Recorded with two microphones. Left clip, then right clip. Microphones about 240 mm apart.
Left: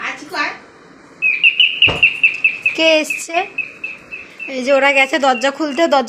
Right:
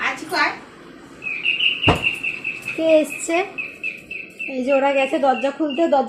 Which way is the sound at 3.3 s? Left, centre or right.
Centre.